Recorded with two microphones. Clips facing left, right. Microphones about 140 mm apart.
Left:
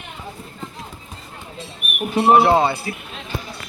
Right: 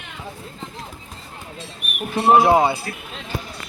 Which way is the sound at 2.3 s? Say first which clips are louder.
Right 2 dB; 15° right (ahead or behind).